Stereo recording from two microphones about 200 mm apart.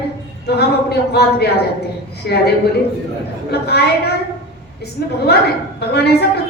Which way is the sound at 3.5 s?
55° left (ahead or behind).